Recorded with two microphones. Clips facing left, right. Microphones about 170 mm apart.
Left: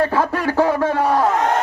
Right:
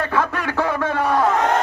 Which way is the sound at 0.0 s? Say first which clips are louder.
Left 4 dB; 35° left (ahead or behind).